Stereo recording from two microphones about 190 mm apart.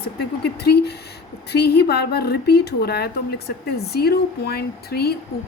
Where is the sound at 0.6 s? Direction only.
60° left (ahead or behind).